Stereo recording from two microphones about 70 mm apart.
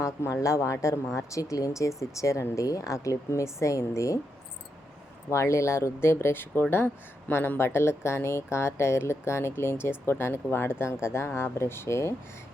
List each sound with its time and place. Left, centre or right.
0.0 s speech: left
5.3 s speech: left